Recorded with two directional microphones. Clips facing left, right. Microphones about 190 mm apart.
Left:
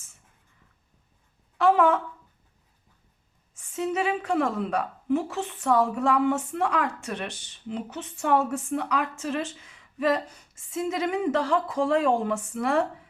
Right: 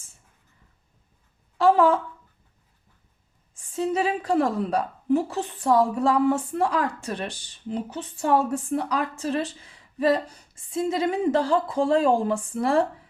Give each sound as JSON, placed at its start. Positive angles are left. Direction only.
{"t": 1.5, "sound": "a woman's voice", "side_deg": -30}
{"t": 3.5, "sound": "a woman's voice", "side_deg": -35}